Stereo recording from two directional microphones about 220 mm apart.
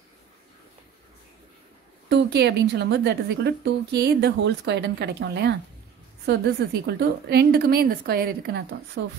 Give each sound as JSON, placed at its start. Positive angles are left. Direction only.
{"t": 2.0, "sound": "a woman's voice", "side_deg": -50}